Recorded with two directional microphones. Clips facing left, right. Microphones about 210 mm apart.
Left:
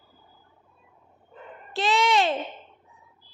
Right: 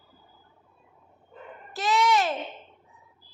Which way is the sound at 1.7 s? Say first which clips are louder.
Left 1 dB; 25° left (ahead or behind).